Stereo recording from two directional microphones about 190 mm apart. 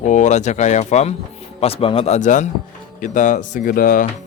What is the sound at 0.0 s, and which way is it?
A man's voice, 40° left (ahead or behind).